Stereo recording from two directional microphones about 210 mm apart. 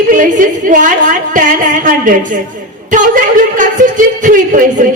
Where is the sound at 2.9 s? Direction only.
40° right (ahead or behind).